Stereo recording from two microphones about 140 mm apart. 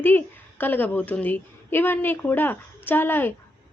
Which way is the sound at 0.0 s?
15° left (ahead or behind).